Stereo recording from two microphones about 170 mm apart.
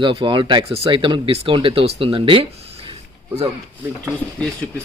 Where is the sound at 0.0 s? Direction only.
30° right (ahead or behind).